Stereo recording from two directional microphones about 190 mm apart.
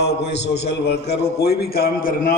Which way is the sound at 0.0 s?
65° left (ahead or behind).